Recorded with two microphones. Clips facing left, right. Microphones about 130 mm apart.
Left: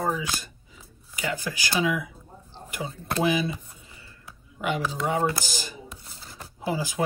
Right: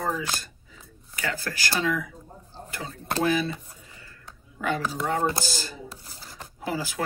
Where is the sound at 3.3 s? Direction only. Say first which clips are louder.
Even; 15° left (ahead or behind).